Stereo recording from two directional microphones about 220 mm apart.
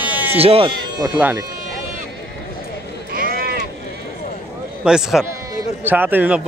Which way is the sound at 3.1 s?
40° right (ahead or behind).